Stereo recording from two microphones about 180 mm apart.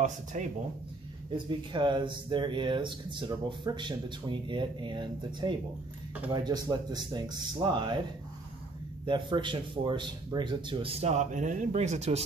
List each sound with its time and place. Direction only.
0.0 s speech: 40° right (ahead or behind)
1.5 s speech: 25° right (ahead or behind)
9.0 s a man's voice: 25° right (ahead or behind)